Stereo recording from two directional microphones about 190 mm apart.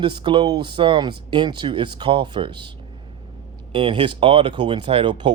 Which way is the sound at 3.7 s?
25° right (ahead or behind).